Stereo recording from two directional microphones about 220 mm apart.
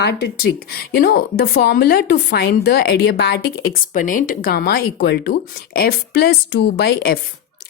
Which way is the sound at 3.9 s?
35° left (ahead or behind).